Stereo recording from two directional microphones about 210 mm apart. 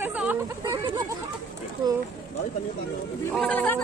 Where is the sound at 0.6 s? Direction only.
20° right (ahead or behind).